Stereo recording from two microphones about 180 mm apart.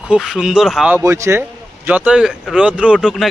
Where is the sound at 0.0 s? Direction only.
5° right (ahead or behind).